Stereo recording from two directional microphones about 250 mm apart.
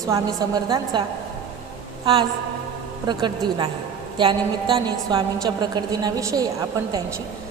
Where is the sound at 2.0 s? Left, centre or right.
Centre.